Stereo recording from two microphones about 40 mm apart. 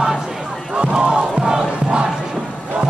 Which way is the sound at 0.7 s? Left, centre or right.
Right.